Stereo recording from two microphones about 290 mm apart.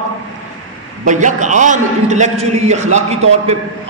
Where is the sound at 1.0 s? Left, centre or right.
Right.